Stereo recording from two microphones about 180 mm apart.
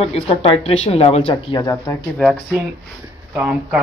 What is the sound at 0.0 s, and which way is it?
Speech, 35° left (ahead or behind).